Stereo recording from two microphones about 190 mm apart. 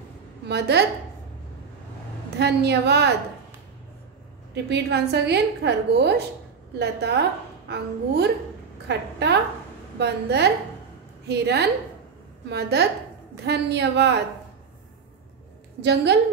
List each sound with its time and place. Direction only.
0.5 s a woman's voice: 60° right (ahead or behind)
2.3 s a woman's voice: 60° right (ahead or behind)
4.6 s a woman's voice: 60° right (ahead or behind)
15.8 s a woman's voice: 60° right (ahead or behind)